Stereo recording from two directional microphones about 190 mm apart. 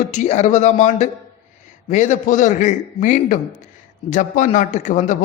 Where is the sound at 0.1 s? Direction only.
40° left (ahead or behind).